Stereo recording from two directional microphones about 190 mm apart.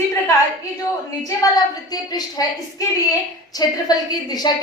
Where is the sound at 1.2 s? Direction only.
20° left (ahead or behind).